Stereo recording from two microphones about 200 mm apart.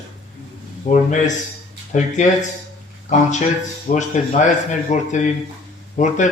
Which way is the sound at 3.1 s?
35° left (ahead or behind).